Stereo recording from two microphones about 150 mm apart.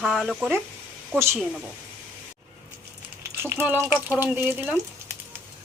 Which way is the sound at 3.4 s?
15° right (ahead or behind).